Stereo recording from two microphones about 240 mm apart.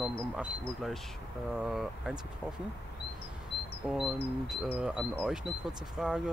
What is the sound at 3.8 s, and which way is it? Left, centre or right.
Speech, centre.